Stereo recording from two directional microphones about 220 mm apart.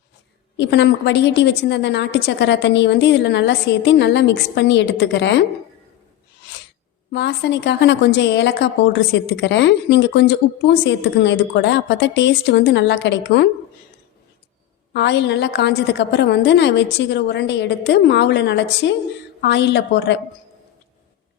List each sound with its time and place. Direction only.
0.5 s a woman's voice: 55° left (ahead or behind)
7.1 s a woman's voice: 50° left (ahead or behind)
14.9 s a woman's voice: 50° left (ahead or behind)